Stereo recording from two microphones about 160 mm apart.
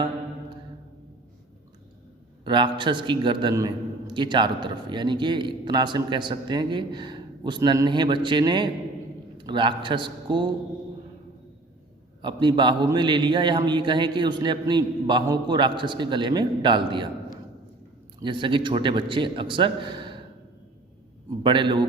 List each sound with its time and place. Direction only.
2.4 s a man's voice: 30° right (ahead or behind)
12.2 s a man's voice: 30° right (ahead or behind)
21.4 s a man's voice: 30° right (ahead or behind)